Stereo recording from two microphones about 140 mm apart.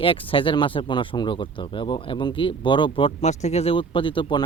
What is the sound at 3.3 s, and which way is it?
Speech, 55° left (ahead or behind).